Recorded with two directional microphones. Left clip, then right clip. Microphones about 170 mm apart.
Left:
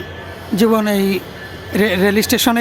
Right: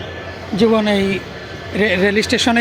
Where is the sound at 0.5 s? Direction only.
50° left (ahead or behind).